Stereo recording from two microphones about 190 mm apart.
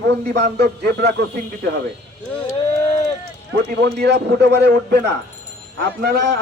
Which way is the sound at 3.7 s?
55° right (ahead or behind).